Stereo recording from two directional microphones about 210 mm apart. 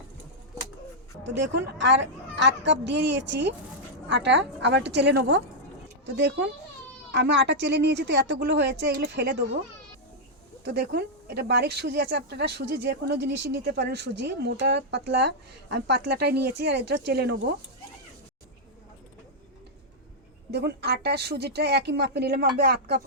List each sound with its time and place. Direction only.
1.2 s a woman's voice: 55° right (ahead or behind)
10.6 s speech: 50° right (ahead or behind)
20.5 s speech: 50° right (ahead or behind)